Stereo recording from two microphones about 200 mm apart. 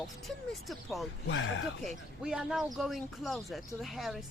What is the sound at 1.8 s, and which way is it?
Speech, centre (ahead or behind).